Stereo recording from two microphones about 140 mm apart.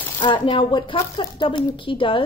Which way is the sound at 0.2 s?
35° left (ahead or behind).